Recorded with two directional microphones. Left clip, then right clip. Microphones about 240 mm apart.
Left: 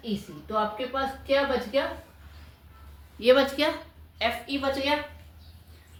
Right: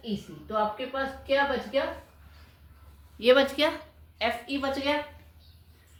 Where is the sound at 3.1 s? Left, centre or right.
Right.